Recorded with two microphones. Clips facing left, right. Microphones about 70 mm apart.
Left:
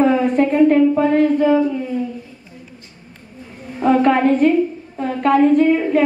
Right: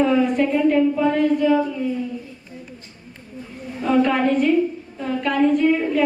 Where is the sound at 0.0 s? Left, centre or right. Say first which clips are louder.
Left 3 dB; left.